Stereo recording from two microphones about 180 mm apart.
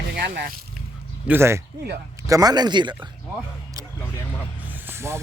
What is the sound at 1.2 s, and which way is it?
A man's voice, 10° right (ahead or behind).